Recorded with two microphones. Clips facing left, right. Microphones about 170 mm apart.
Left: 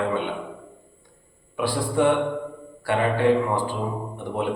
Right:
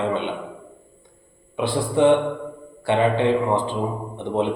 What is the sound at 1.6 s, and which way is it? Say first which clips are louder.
A man's voice: right 3 dB; 20° right (ahead or behind).